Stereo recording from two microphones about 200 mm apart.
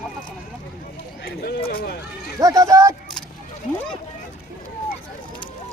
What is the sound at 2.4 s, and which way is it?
Speech, 15° right (ahead or behind).